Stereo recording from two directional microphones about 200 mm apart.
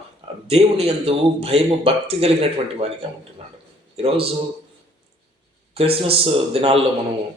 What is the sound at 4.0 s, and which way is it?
Speech, 30° right (ahead or behind).